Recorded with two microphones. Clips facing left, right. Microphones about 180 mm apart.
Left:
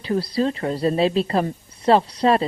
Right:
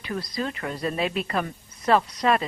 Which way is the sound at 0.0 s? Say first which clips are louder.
Left 8 dB; 30° left (ahead or behind).